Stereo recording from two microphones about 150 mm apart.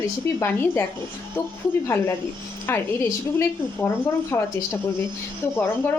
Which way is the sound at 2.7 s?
15° left (ahead or behind).